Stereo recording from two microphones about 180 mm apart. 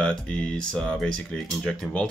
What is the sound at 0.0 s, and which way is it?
Speech, 5° left (ahead or behind).